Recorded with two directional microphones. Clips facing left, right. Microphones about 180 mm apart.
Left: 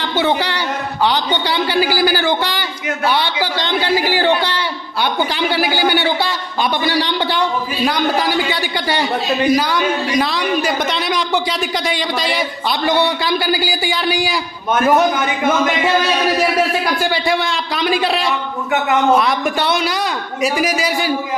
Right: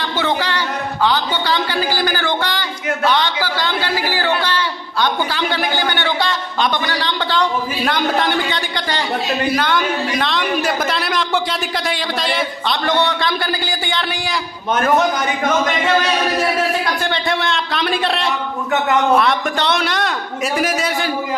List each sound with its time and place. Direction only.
0.2 s a man's voice: 15° left (ahead or behind)
17.0 s a man's voice: 5° left (ahead or behind)